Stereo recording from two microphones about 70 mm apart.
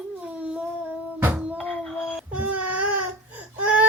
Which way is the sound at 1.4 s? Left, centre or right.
Centre.